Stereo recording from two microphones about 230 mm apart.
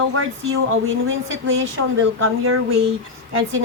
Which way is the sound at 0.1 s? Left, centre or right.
Right.